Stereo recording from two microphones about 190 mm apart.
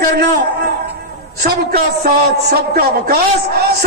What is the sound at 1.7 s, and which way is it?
A man's voice, 50° right (ahead or behind).